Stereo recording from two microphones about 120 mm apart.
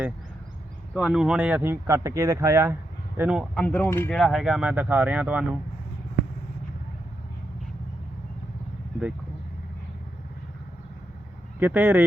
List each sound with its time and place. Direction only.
0.9 s speech: 5° right (ahead or behind); by 2.7 s 25° right (ahead or behind)
3.2 s speech: 10° right (ahead or behind)
3.5 s speech: 10° left (ahead or behind)
4.1 s speech: centre (ahead or behind)
11.6 s speech: 15° right (ahead or behind)